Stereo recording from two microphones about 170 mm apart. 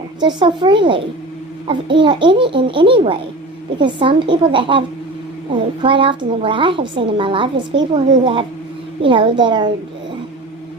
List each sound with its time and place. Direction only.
0.2 s a child's voice: 25° right (ahead or behind)
5.8 s speech: 30° right (ahead or behind)